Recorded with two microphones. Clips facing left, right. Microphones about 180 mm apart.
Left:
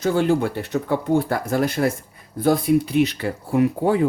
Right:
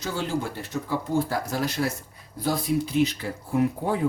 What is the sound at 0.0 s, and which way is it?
Speech, 55° left (ahead or behind).